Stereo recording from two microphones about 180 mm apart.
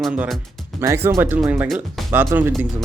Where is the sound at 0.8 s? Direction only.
15° right (ahead or behind).